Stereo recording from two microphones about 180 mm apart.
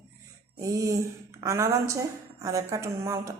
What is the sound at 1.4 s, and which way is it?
Speech, 15° right (ahead or behind).